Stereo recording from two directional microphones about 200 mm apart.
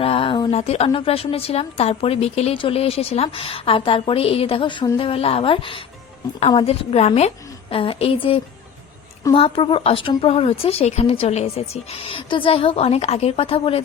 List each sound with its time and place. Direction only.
0.0 s speech: 30° left (ahead or behind)